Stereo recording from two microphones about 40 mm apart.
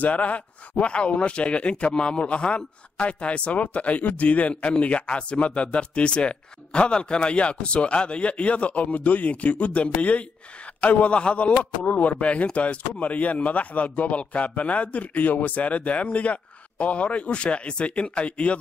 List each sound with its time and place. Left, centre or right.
0.0 s speech: left